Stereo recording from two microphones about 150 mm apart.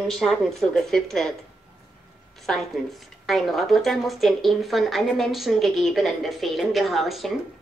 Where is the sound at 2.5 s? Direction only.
5° left (ahead or behind).